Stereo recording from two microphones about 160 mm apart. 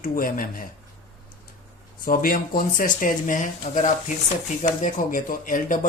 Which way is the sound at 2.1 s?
65° left (ahead or behind).